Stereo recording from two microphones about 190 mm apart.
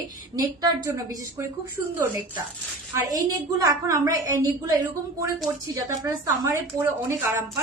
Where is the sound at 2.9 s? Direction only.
20° right (ahead or behind).